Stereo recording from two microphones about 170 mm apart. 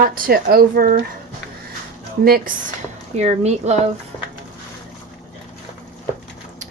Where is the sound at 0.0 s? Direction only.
55° right (ahead or behind).